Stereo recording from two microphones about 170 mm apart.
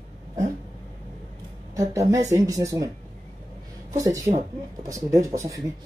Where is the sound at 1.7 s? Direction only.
20° right (ahead or behind).